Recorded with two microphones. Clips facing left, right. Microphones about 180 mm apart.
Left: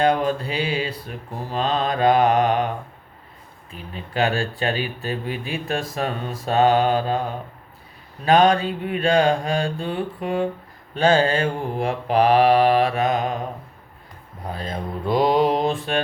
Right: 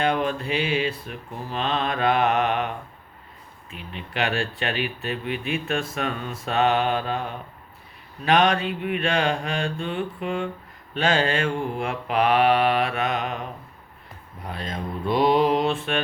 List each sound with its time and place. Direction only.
0.0 s speech: 35° left (ahead or behind)